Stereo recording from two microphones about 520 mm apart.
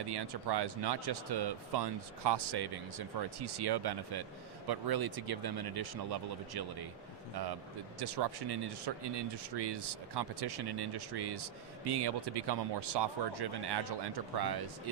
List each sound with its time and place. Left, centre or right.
0.0 s speech: right
7.9 s speech: right